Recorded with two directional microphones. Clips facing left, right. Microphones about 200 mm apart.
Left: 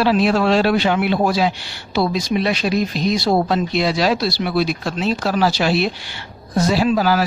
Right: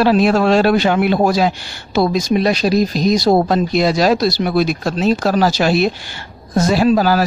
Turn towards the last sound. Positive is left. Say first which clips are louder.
# right 3 dB
turn(degrees=-40)  # may be behind; listen again after turning